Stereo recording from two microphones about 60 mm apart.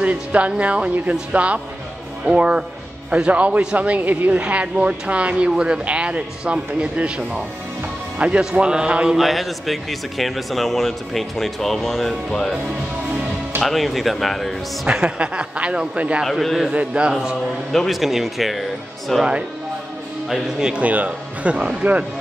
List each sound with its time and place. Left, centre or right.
0.0 s a man's voice: right
9.1 s a man's voice: centre
13.6 s a man's voice: centre
14.9 s a man's voice: centre
16.3 s a man's voice: centre
16.7 s a man's voice: centre
20.2 s a man's voice: centre
20.8 s speech: right